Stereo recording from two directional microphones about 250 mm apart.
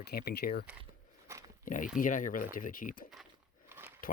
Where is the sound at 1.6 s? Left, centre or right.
Left.